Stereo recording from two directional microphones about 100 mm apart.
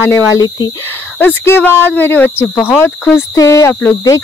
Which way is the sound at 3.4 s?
30° left (ahead or behind).